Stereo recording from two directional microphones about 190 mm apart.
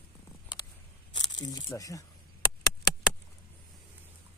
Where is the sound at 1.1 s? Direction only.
25° left (ahead or behind).